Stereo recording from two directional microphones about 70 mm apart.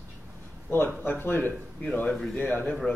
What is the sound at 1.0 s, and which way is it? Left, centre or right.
Speech, left.